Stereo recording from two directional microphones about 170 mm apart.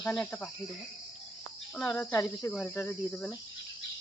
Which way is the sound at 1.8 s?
5° left (ahead or behind).